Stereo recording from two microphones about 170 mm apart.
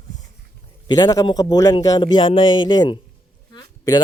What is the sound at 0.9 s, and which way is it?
A man's voice, 25° left (ahead or behind).